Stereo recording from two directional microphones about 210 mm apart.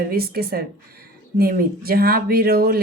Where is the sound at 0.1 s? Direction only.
45° right (ahead or behind).